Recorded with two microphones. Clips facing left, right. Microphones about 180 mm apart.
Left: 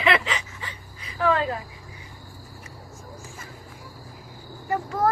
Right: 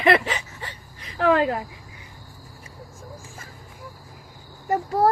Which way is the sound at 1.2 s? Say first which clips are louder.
Right 4 dB; 55° right (ahead or behind).